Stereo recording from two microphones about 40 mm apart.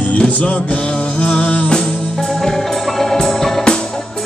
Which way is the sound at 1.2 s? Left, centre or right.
Left.